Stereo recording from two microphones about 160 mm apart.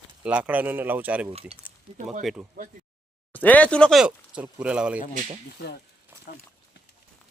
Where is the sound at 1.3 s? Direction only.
40° right (ahead or behind).